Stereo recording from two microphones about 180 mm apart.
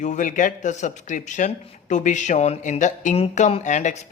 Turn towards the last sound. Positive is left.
turn(degrees=40)  # may be behind; listen again after turning